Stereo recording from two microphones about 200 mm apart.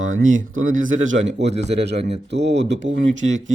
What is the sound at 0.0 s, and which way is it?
Speech, 90° right.